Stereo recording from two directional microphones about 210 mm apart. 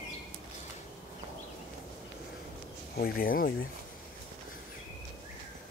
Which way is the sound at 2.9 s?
45° left (ahead or behind).